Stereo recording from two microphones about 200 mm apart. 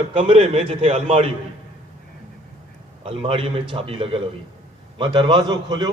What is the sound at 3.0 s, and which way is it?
A man's voice, 30° right (ahead or behind).